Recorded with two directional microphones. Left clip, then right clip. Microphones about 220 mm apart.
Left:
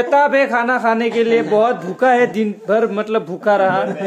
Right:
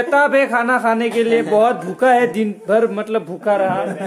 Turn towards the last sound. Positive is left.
turn(degrees=15)  # may be behind; listen again after turning